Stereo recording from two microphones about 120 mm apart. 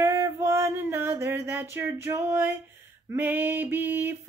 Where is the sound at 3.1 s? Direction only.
15° right (ahead or behind).